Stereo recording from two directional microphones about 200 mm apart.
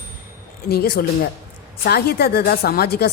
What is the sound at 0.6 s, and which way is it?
A woman's voice, 50° left (ahead or behind).